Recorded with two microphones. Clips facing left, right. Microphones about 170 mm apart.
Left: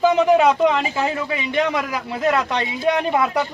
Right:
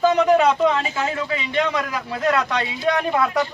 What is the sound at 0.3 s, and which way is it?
Speech, 15° left (ahead or behind).